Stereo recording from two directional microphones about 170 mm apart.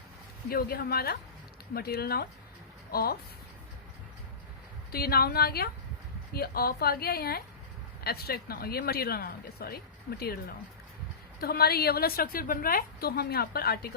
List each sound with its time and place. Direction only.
0.5 s a woman's voice: 60° left (ahead or behind)
4.9 s a woman's voice: 65° left (ahead or behind)